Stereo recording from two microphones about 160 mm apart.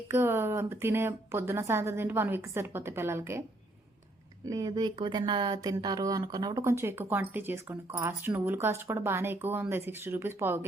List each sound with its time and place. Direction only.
0.1 s speech: 15° right (ahead or behind)
4.4 s speech: 25° right (ahead or behind)